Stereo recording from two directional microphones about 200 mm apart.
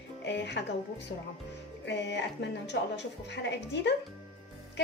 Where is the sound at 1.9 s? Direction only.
60° left (ahead or behind).